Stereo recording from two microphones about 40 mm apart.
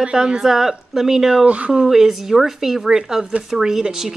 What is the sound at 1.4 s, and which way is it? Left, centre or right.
Speech, right.